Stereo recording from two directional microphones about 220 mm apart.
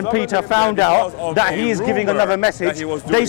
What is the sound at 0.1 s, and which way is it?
A man's voice, 20° left (ahead or behind).